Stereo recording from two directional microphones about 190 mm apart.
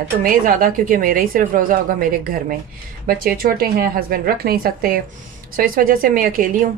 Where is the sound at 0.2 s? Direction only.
45° right (ahead or behind).